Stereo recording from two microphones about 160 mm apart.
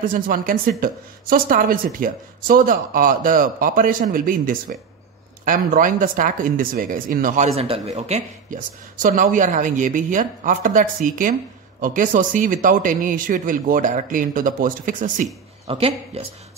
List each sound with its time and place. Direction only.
0.0 s speech: 60° right (ahead or behind)
15.6 s speech: 35° right (ahead or behind)